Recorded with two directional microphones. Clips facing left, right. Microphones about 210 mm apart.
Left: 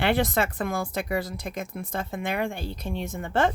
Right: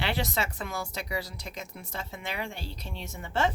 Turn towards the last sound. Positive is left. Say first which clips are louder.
# left 5 dB
turn(degrees=55)  # may be behind; listen again after turning